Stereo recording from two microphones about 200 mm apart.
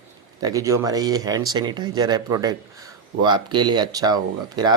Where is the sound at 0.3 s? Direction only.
15° right (ahead or behind).